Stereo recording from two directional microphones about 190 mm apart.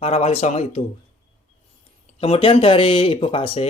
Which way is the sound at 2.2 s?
30° left (ahead or behind).